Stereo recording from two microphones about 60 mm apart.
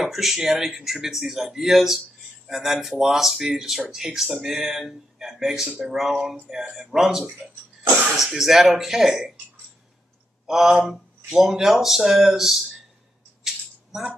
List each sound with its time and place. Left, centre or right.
0.0 s speech: centre
10.4 s speech: centre
13.4 s rattle: centre